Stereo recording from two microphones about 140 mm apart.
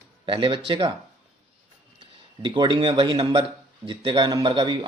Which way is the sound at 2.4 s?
35° right (ahead or behind).